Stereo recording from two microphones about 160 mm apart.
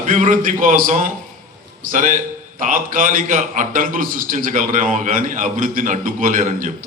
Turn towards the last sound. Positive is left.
turn(degrees=-55)  # may be behind; listen again after turning